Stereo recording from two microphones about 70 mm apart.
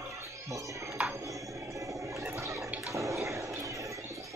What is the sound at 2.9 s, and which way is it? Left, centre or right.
Bathtub, right.